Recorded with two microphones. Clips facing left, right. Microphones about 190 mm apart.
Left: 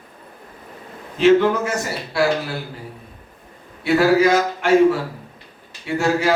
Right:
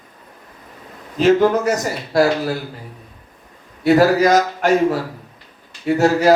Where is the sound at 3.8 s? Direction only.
40° right (ahead or behind).